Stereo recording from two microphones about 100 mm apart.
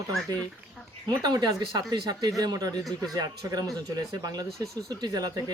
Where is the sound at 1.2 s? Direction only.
45° right (ahead or behind).